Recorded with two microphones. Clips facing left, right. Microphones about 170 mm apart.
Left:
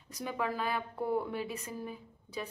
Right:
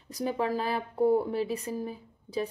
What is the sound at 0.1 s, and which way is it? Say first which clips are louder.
Speech: right 6 dB; 35° right (ahead or behind).